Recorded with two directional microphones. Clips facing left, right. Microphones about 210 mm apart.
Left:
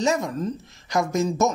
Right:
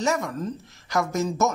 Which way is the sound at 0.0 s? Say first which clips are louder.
Left 2 dB; 20° left (ahead or behind).